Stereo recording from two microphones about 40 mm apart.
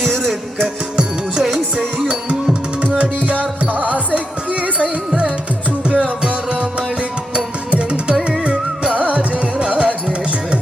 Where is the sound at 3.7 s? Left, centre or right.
Right.